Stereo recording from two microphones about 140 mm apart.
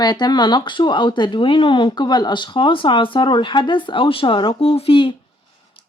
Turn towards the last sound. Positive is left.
turn(degrees=40)  # may be behind; listen again after turning